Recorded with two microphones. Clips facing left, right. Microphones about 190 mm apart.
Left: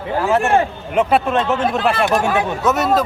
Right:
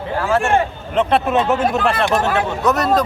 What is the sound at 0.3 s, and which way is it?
Speech, 20° left (ahead or behind).